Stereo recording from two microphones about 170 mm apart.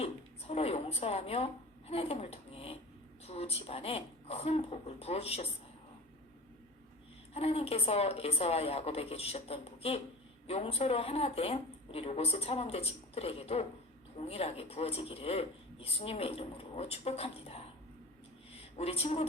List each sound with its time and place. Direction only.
0.0 s a woman's voice: 35° left (ahead or behind)
7.3 s a woman's voice: 35° left (ahead or behind)